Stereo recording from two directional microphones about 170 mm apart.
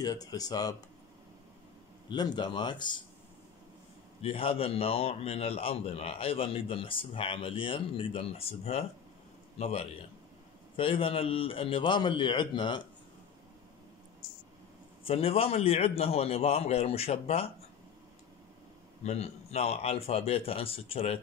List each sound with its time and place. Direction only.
0.0 s speech: 25° left (ahead or behind)
2.0 s speech: 25° left (ahead or behind)
4.2 s a man's voice: 35° left (ahead or behind)
15.0 s a man's voice: 35° left (ahead or behind)
19.0 s a man's voice: 35° left (ahead or behind)